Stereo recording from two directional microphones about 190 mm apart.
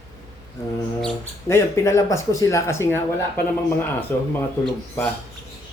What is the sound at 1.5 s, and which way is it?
Speech, 15° left (ahead or behind).